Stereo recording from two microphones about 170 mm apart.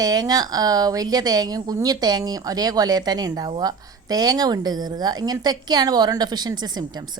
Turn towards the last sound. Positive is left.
turn(degrees=-25)  # may be behind; listen again after turning